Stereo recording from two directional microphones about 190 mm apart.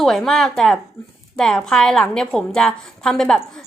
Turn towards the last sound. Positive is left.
turn(degrees=5)  # may be behind; listen again after turning